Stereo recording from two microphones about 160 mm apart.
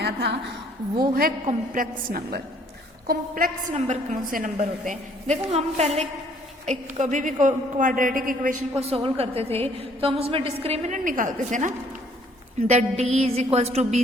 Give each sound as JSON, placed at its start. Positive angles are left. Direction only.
{"t": 0.0, "sound": "a sound", "side_deg": -90}
{"t": 0.9, "sound": "a woman's voice", "side_deg": -65}
{"t": 3.8, "sound": "a woman's voice", "side_deg": -45}
{"t": 8.7, "sound": "a woman's voice", "side_deg": -40}